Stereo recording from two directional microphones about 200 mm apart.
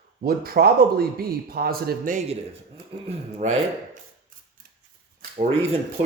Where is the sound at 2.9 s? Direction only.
30° right (ahead or behind).